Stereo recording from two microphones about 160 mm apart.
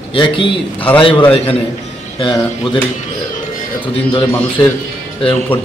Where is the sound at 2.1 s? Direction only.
30° left (ahead or behind).